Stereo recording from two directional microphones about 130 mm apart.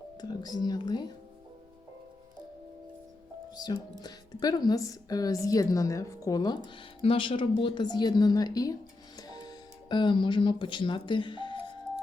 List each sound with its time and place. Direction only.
0.2 s speech: 30° left (ahead or behind)
3.5 s speech: 30° left (ahead or behind)
7.0 s a woman's voice: 45° left (ahead or behind)